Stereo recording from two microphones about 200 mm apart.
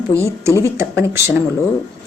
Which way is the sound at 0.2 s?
15° right (ahead or behind).